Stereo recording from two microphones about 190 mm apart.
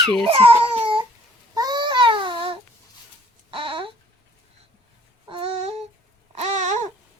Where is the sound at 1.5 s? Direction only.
20° right (ahead or behind).